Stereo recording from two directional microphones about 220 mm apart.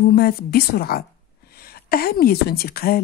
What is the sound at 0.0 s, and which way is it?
A woman's voice, 45° left (ahead or behind).